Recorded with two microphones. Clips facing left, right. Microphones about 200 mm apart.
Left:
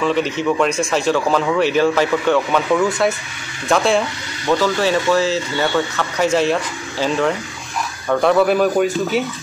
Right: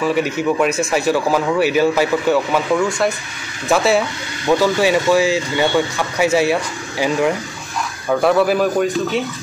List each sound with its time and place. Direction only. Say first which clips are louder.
0.0 s speech: even; 10° right (ahead or behind)